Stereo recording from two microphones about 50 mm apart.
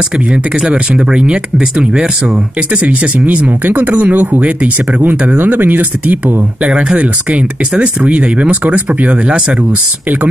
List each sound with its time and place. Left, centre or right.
0.6 s speech: centre; by 5.4 s right
5.4 s speech: right
6.7 s speech: centre
7.0 s speech: right